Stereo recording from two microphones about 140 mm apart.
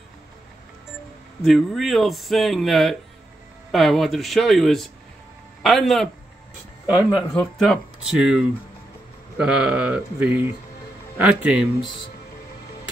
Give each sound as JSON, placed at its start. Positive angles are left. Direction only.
{"t": 1.4, "sound": "a man's voice", "side_deg": 0}
{"t": 7.3, "sound": "speech", "side_deg": 5}